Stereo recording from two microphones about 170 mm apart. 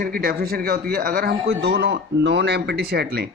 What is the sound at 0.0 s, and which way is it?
A man's voice, 60° right (ahead or behind).